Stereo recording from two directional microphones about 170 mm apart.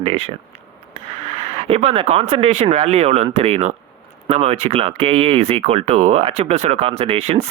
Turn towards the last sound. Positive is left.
turn(degrees=-40)  # may be behind; listen again after turning